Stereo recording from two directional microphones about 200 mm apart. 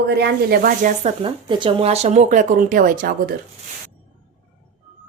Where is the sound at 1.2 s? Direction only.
25° right (ahead or behind); by 3.1 s 45° right (ahead or behind).